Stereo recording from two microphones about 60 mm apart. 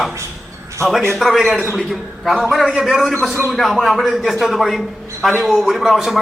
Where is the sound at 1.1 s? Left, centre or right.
Centre.